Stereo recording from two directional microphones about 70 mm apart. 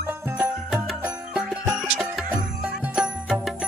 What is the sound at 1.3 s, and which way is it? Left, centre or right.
Music, centre.